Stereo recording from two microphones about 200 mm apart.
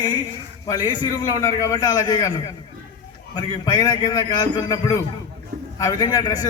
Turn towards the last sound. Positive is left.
turn(degrees=20)  # may be behind; listen again after turning